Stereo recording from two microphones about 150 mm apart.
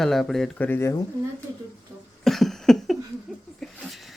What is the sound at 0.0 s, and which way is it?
Speech, centre (ahead or behind).